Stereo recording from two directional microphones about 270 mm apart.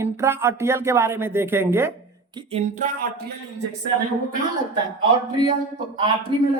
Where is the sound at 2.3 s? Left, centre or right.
Right.